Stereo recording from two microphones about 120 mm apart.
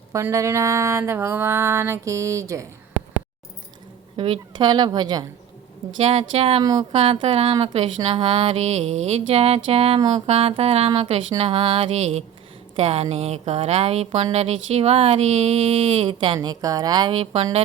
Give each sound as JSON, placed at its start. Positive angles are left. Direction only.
{"t": 0.1, "sound": "a sound", "side_deg": -25}
{"t": 4.2, "sound": "a woman's voice", "side_deg": -45}
{"t": 6.0, "sound": "speech", "side_deg": -60}
{"t": 6.6, "sound": "a woman's voice", "side_deg": -35}
{"t": 6.9, "sound": "speech", "side_deg": -55}
{"t": 8.1, "sound": "speech", "side_deg": -45}